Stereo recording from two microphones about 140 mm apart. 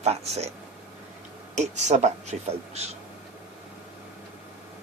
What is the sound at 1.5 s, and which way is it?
Speech, 55° right (ahead or behind).